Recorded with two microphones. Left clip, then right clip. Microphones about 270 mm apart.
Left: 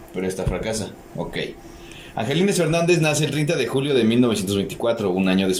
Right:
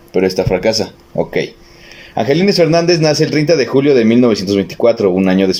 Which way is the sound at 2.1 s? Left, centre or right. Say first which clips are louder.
Right 10 dB; right.